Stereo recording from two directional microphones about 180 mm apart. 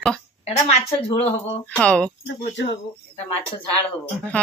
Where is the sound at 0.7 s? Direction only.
35° left (ahead or behind).